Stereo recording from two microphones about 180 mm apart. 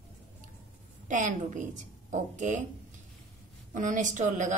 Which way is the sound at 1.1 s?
45° right (ahead or behind).